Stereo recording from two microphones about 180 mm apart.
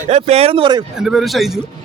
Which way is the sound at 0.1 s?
35° right (ahead or behind).